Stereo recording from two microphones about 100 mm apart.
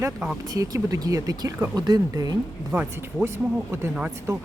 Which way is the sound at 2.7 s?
10° right (ahead or behind).